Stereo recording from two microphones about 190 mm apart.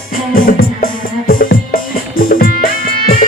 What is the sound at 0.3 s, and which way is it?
Music, 50° left (ahead or behind).